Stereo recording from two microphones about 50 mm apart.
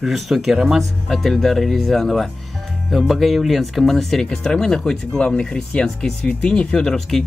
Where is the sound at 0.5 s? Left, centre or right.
Centre.